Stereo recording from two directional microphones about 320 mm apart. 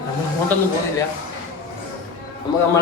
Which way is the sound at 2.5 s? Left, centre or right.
Centre.